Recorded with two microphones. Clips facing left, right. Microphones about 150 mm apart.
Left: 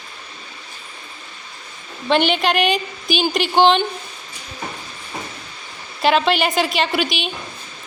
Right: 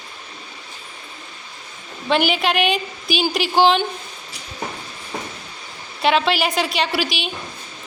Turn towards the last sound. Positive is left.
turn(degrees=0)  # may be behind; listen again after turning